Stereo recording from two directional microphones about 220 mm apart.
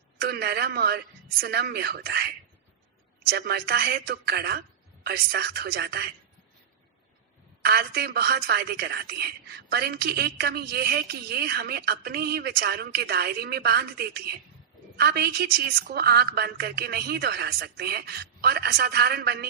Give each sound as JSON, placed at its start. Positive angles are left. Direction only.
{"t": 0.2, "sound": "a woman's voice", "side_deg": -45}
{"t": 7.6, "sound": "a woman's voice", "side_deg": -45}